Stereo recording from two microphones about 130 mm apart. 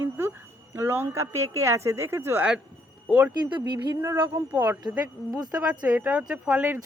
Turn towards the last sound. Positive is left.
turn(degrees=-15)  # may be behind; listen again after turning